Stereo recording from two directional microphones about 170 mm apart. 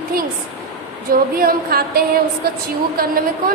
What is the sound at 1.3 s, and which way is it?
A woman's voice, 60° right (ahead or behind).